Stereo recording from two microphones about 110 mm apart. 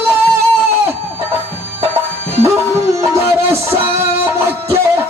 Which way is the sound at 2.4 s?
25° right (ahead or behind).